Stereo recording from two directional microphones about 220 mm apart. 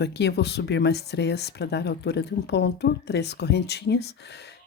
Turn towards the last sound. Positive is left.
turn(degrees=50)  # may be behind; listen again after turning